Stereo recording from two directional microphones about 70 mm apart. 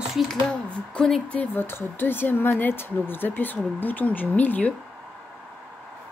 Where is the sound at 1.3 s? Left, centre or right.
Left.